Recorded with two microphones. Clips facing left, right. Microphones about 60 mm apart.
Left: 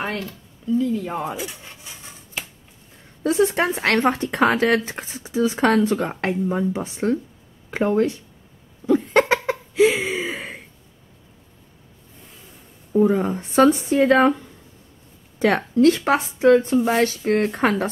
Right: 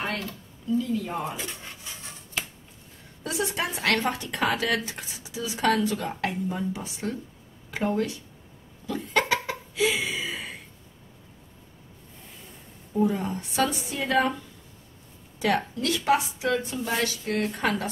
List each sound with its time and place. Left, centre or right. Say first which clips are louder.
0.7 s speech: left 5 dB; left
1.2 s speech: left 5 dB; centre
3.3 s speech: left 10 dB; left
8.8 s a sound: left 9 dB; left
12.9 s speech: left 7 dB; left
15.3 s speech: left 7 dB; left